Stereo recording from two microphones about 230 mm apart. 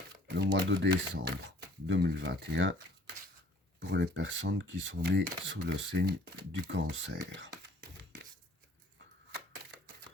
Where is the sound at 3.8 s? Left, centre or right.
Right.